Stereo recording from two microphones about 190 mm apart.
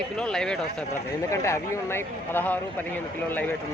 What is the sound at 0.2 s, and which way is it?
Speech, 5° left (ahead or behind).